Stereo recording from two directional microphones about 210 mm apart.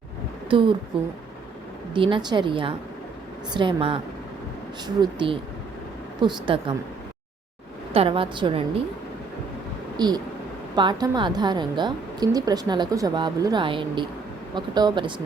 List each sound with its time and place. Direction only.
0.9 s a woman's voice: 25° right (ahead or behind)
7.9 s a woman's voice: 25° right (ahead or behind)
10.8 s a woman's voice: 20° right (ahead or behind)